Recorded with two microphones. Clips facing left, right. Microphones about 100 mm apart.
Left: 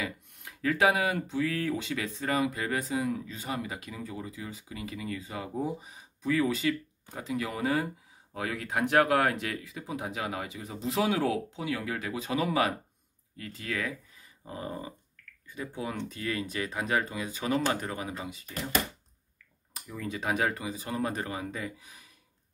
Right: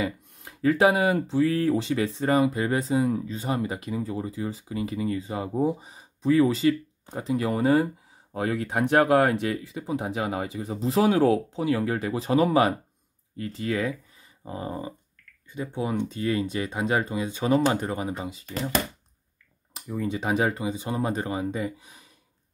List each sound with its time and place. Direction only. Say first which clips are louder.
0.0 s speech: right 7 dB; 30° right (ahead or behind)
19.7 s speech: right 7 dB; 25° right (ahead or behind)